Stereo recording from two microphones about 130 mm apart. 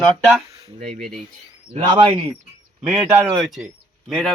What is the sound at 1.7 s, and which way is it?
Speech, 40° right (ahead or behind).